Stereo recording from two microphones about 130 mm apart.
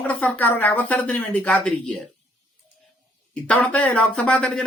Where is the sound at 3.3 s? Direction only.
10° left (ahead or behind).